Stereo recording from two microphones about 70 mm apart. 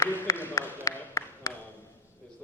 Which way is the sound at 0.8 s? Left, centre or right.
Left.